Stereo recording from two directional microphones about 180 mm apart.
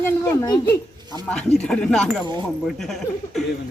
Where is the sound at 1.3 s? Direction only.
5° left (ahead or behind).